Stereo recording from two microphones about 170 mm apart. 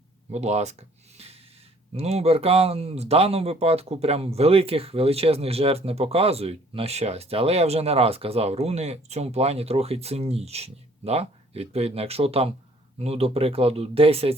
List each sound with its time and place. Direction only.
0.3 s speech: 40° right (ahead or behind)